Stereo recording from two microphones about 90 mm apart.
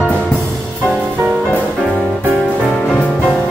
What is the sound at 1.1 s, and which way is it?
Music, 15° right (ahead or behind).